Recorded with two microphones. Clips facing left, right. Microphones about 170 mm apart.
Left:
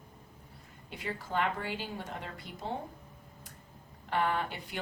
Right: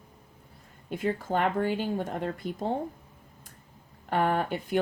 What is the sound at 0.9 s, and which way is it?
Speech, 45° right (ahead or behind).